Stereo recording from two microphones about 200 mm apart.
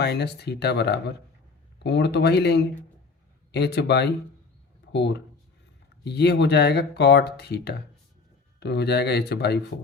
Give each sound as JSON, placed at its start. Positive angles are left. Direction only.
{"t": 0.0, "sound": "speech", "side_deg": 55}